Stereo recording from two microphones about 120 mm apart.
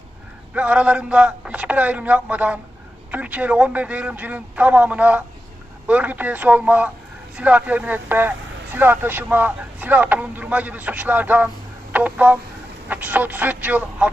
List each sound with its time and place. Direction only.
0.5 s speech: 10° right (ahead or behind)
11.9 s telephone dialing: 15° right (ahead or behind)
12.9 s speech: 15° right (ahead or behind)